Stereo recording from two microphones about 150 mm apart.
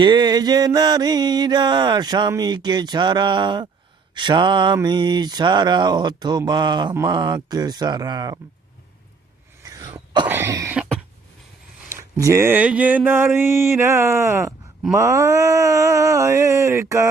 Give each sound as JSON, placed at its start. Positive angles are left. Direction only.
{"t": 0.0, "sound": "mantra", "side_deg": -30}
{"t": 9.6, "sound": "cough", "side_deg": -25}
{"t": 10.2, "sound": "cough", "side_deg": -15}
{"t": 11.9, "sound": "speech", "side_deg": -20}
{"t": 14.9, "sound": "mantra", "side_deg": -20}